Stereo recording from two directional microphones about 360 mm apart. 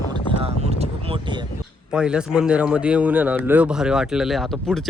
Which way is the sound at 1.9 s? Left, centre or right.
Centre.